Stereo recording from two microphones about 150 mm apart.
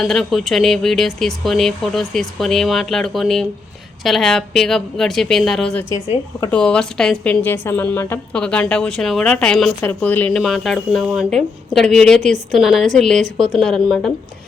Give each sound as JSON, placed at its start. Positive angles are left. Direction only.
{"t": 0.0, "sound": "a woman's voice", "side_deg": 0}